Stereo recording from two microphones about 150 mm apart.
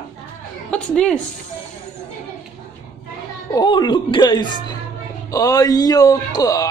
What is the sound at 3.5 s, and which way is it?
Speech, 30° left (ahead or behind).